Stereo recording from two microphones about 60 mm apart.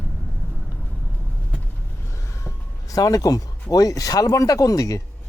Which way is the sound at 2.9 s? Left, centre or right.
Left.